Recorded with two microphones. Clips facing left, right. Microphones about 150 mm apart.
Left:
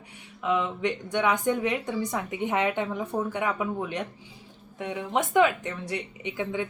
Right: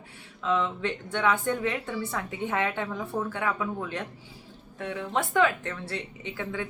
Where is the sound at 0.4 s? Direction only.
15° left (ahead or behind).